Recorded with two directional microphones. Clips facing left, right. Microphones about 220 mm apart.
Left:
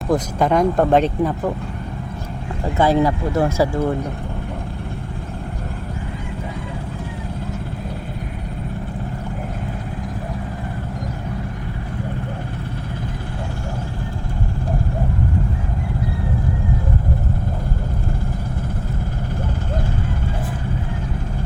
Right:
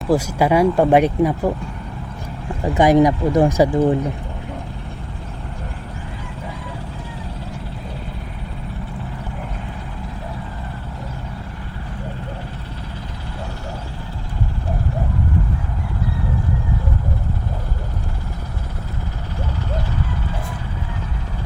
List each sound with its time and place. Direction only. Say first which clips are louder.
0.1 s speech: right 1 dB; 10° right (ahead or behind)
2.7 s speech: right 3 dB; 15° right (ahead or behind)